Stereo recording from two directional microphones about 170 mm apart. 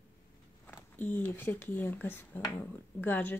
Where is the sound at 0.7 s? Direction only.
10° left (ahead or behind).